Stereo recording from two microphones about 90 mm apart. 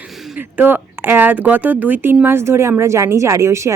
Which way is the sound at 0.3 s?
20° right (ahead or behind).